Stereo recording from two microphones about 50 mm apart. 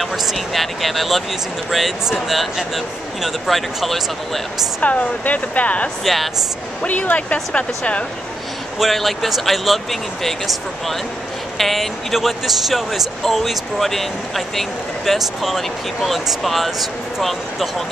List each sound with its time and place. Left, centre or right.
0.0 s speech: centre
4.8 s speech: left
6.9 s speech: left
8.7 s speech: centre